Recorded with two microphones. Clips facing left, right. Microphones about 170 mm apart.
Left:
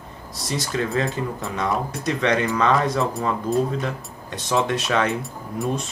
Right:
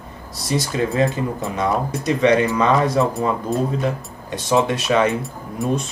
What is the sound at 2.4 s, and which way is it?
Speech, 15° right (ahead or behind).